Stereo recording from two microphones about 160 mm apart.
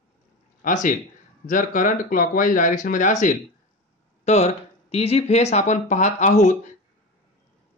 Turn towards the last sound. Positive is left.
turn(degrees=50)  # may be behind; listen again after turning